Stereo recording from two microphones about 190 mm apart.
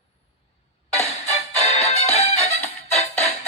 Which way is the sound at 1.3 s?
35° left (ahead or behind).